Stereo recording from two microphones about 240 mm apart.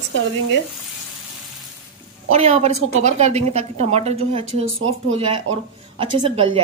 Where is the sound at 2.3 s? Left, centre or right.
Right.